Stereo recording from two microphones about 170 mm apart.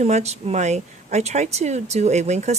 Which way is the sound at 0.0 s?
40° right (ahead or behind).